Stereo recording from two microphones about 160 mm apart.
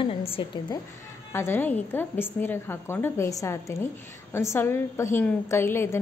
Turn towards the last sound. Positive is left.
turn(degrees=15)  # may be behind; listen again after turning